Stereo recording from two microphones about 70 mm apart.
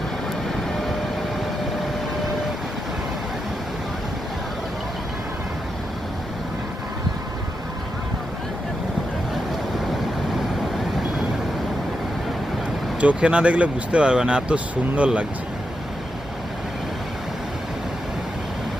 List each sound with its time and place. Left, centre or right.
13.0 s speech: centre